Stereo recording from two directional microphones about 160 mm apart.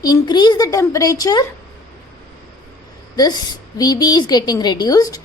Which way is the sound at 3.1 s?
25° left (ahead or behind).